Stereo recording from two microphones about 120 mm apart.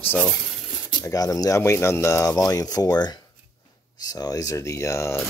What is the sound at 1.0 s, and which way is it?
Speech, 30° left (ahead or behind).